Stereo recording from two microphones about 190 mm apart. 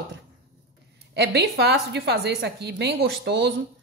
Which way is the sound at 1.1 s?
60° right (ahead or behind).